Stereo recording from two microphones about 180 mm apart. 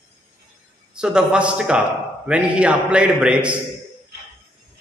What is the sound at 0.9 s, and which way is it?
A man's voice, 5° right (ahead or behind).